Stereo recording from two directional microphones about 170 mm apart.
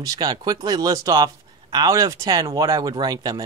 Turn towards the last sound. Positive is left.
turn(degrees=-20)  # may be behind; listen again after turning